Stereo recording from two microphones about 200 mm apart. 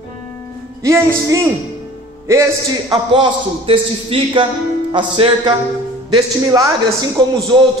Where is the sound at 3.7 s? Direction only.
25° right (ahead or behind).